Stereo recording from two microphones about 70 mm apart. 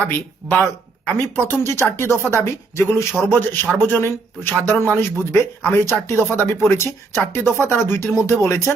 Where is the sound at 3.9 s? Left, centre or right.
Left.